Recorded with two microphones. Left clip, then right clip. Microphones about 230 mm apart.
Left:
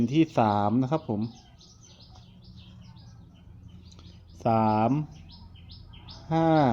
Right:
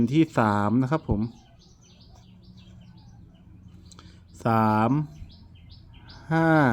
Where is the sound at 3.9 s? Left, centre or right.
Right.